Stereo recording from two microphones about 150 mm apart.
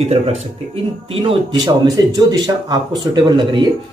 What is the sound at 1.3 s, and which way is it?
Speech, 30° right (ahead or behind).